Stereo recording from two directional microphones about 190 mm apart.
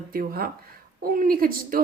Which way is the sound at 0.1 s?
50° right (ahead or behind).